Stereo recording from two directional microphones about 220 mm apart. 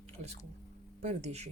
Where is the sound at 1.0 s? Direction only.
30° right (ahead or behind).